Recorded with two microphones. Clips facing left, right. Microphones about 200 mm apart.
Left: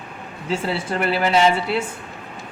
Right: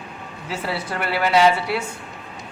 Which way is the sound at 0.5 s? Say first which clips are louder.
Left 4 dB; 25° left (ahead or behind).